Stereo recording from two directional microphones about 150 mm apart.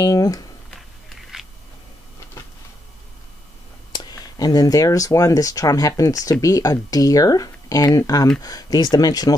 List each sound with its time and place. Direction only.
0.0 s speech: 25° left (ahead or behind)
1.3 s a sound: 5° right (ahead or behind)
3.9 s speech: 25° left (ahead or behind)